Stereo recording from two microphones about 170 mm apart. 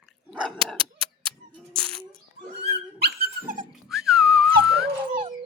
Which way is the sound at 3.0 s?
65° right (ahead or behind).